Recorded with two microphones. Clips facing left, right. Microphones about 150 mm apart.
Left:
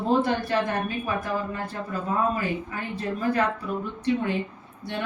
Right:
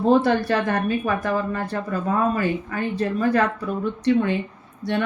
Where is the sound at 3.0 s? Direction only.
75° right (ahead or behind).